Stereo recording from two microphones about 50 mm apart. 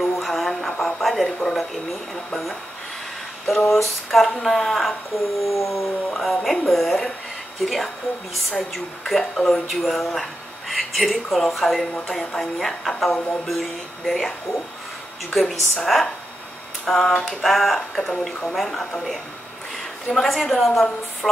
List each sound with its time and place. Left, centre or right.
0.0 s music: centre
3.7 s speech: centre
5.4 s a sound: left
5.7 s speech: centre
15.3 s a woman's voice: centre